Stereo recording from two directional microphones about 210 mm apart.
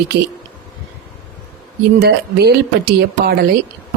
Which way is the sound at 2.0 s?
50° right (ahead or behind).